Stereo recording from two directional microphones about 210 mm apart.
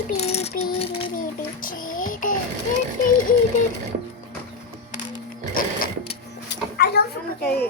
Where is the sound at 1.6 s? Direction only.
40° left (ahead or behind).